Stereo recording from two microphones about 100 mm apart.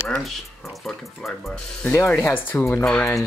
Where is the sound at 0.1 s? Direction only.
Centre (ahead or behind).